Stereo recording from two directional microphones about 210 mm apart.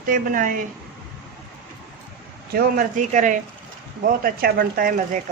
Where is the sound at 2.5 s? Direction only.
45° right (ahead or behind).